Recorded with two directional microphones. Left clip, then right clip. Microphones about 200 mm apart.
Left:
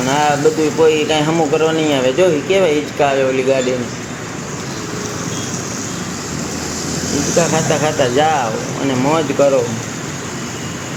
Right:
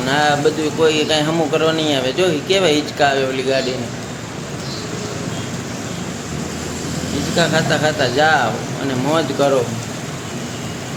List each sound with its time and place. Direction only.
0.1 s speech: 10° right (ahead or behind)
7.3 s speech: 10° right (ahead or behind)